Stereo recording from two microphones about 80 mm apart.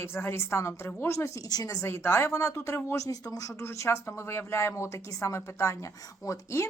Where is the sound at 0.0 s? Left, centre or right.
Left.